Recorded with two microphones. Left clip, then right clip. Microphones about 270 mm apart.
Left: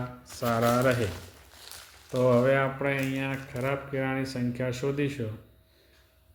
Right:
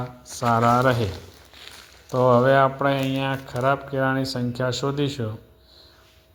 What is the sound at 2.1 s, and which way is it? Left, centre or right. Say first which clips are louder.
Speech: right 6 dB; centre.